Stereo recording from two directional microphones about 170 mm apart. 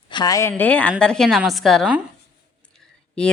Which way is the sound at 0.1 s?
25° left (ahead or behind).